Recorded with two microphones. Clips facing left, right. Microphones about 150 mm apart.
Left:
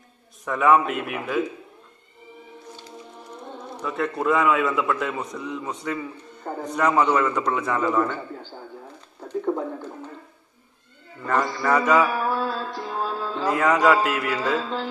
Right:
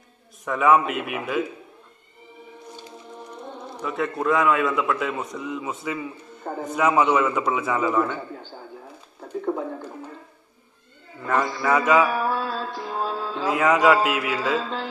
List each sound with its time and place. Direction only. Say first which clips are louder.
0.5 s a man's voice: even; centre (ahead or behind)
3.8 s a man's voice: even; centre (ahead or behind)
9.3 s a man's voice: left 1 dB; 5° right (ahead or behind)
11.2 s a man's voice: even; 5° right (ahead or behind)
12.4 s music: left 1 dB; 10° right (ahead or behind)
13.4 s a man's voice: even; centre (ahead or behind)